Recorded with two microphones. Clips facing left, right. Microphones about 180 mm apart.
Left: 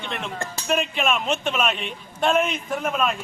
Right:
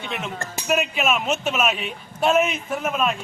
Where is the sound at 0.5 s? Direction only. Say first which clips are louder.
Right 2 dB; 10° right (ahead or behind).